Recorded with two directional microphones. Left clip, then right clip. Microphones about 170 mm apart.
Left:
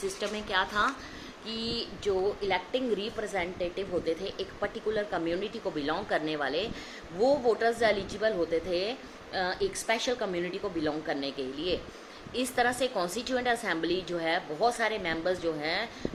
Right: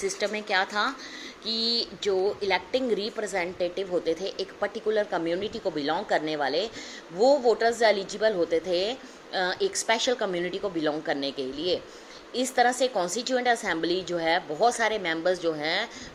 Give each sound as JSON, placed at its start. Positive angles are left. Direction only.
{"t": 0.4, "sound": "a woman's voice", "side_deg": -30}
{"t": 1.5, "sound": "speech", "side_deg": -5}
{"t": 2.0, "sound": "a woman's voice", "side_deg": -30}